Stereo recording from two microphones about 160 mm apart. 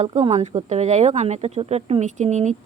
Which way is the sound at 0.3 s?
40° right (ahead or behind).